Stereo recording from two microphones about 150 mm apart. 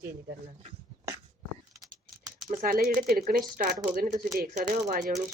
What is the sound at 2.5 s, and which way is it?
Chopping, 70° right (ahead or behind).